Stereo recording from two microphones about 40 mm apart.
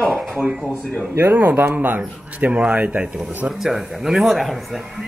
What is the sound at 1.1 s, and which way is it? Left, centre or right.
Speech, right.